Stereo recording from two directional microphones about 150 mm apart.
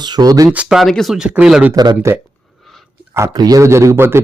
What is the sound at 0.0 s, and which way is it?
Speech, 25° right (ahead or behind).